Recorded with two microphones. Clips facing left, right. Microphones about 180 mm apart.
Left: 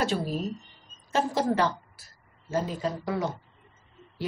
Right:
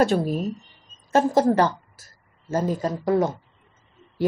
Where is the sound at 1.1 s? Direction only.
45° right (ahead or behind).